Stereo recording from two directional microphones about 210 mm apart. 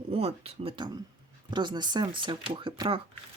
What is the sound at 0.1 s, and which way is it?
Speech, 30° right (ahead or behind).